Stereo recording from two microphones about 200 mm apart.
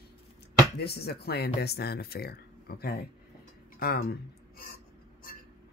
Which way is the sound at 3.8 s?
50° left (ahead or behind).